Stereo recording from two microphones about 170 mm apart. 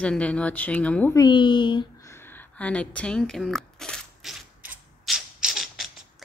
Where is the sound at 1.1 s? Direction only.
25° left (ahead or behind).